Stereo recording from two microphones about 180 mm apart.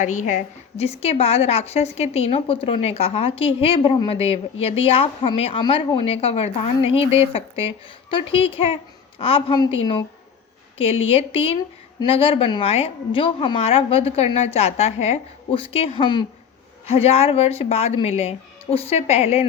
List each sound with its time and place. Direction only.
0.0 s a woman's voice: 45° left (ahead or behind)